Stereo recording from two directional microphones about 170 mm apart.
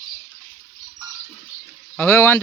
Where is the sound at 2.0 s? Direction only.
15° left (ahead or behind).